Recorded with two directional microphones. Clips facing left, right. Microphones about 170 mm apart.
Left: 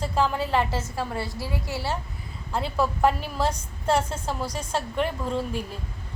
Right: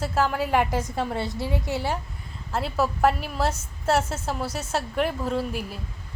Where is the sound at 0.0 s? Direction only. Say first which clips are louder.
Even; 5° right (ahead or behind).